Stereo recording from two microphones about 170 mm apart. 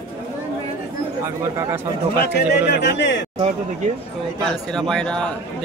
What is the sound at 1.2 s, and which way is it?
Speech, 15° right (ahead or behind).